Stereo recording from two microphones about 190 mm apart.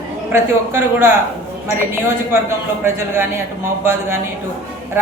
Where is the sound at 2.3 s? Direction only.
10° right (ahead or behind).